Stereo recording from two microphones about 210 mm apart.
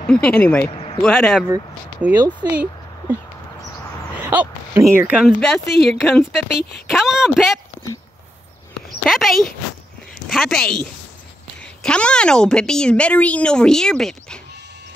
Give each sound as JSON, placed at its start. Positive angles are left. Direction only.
{"t": 0.0, "sound": "speech", "side_deg": 5}
{"t": 0.7, "sound": "a sound", "side_deg": 25}
{"t": 1.0, "sound": "speech", "side_deg": 5}
{"t": 1.5, "sound": "speech", "side_deg": -10}
{"t": 4.2, "sound": "speech", "side_deg": -10}
{"t": 9.0, "sound": "speech", "side_deg": 0}